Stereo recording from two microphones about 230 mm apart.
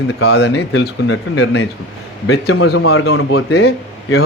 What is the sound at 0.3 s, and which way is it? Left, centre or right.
Speech, left.